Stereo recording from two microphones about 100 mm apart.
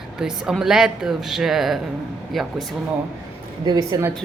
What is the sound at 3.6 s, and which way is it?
Speech, 40° right (ahead or behind).